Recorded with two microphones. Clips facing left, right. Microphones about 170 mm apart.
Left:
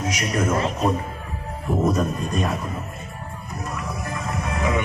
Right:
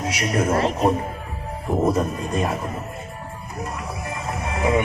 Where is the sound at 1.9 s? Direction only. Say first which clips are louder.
Right 1 dB; 30° right (ahead or behind).